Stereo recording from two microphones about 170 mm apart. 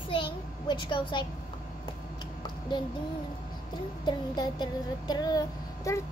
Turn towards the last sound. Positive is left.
turn(degrees=20)  # may be behind; listen again after turning